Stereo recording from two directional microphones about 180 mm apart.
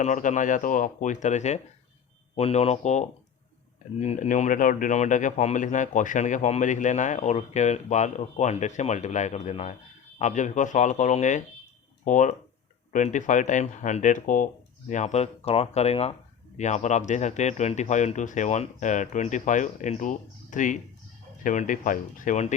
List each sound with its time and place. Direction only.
0.0 s a man's voice: 40° left (ahead or behind)